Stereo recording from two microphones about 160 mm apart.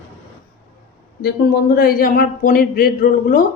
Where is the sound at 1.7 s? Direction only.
65° left (ahead or behind).